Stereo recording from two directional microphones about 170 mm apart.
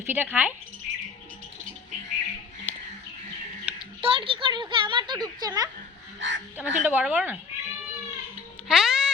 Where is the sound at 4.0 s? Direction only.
30° right (ahead or behind).